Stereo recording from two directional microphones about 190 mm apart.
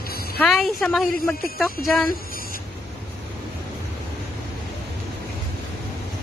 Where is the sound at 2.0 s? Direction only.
50° left (ahead or behind).